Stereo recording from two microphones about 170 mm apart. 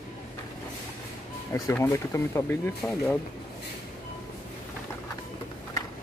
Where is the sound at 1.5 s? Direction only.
15° left (ahead or behind).